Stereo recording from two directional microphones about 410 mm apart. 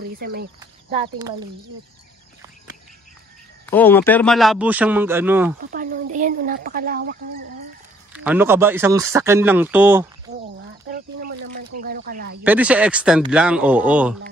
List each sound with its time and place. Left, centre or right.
0.2 s speech: right
3.6 s a man's voice: centre
5.6 s speech: right
8.1 s a man's voice: centre
10.3 s a sound: right
11.8 s speech: right
12.4 s a man's voice: centre